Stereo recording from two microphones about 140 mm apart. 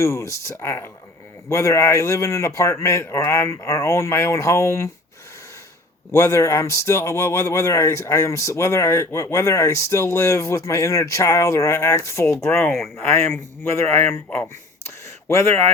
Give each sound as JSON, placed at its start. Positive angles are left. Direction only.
{"t": 0.0, "sound": "speech", "side_deg": 20}
{"t": 6.1, "sound": "speech", "side_deg": 20}
{"t": 12.5, "sound": "speech", "side_deg": 5}
{"t": 13.1, "sound": "speech", "side_deg": 20}